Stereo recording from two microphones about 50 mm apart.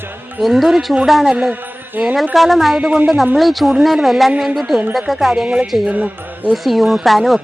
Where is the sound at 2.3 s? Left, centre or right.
Centre.